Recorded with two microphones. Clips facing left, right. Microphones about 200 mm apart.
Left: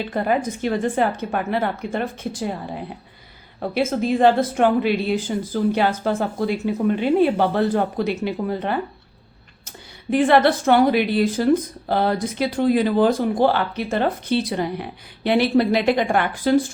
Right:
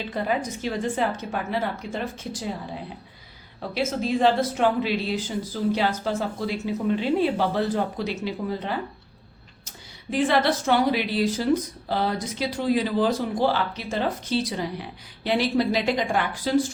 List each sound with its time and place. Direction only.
0.1 s speech: 55° left (ahead or behind)